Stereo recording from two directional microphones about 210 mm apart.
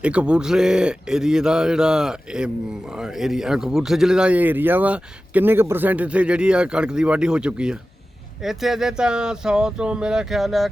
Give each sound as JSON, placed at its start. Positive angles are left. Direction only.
{"t": 0.0, "sound": "speech", "side_deg": -5}